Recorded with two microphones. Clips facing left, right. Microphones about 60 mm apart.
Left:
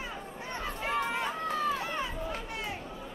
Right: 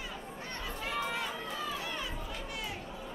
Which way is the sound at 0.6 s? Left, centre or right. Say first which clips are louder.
Left 4 dB; left.